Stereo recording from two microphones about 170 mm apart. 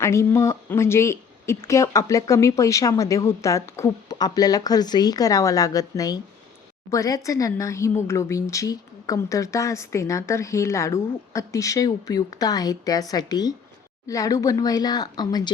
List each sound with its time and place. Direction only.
0.0 s a woman's voice: 15° left (ahead or behind)